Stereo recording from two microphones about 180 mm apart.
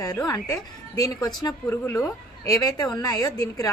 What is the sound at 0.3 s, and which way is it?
A woman's voice, 20° left (ahead or behind).